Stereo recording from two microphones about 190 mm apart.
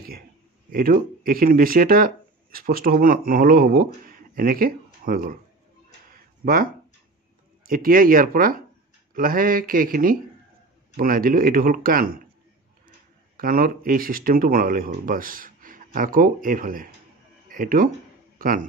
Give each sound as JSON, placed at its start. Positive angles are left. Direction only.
{"t": 0.7, "sound": "speech", "side_deg": -50}
{"t": 6.0, "sound": "a sound", "side_deg": -50}
{"t": 7.6, "sound": "speech", "side_deg": -50}
{"t": 13.4, "sound": "a man's voice", "side_deg": -50}